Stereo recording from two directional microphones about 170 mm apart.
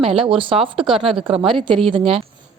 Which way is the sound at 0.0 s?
30° right (ahead or behind).